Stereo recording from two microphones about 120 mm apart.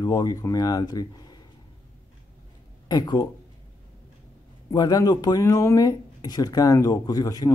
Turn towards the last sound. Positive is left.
turn(degrees=30)  # may be behind; listen again after turning